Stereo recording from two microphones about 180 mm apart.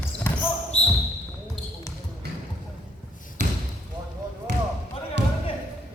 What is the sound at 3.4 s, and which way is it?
Basketball bounce, 65° right (ahead or behind).